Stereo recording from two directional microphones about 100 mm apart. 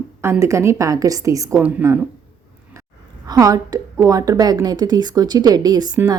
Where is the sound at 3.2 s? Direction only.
40° right (ahead or behind).